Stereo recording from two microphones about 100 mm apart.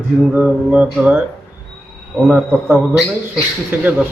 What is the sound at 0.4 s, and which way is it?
Speech, 5° right (ahead or behind).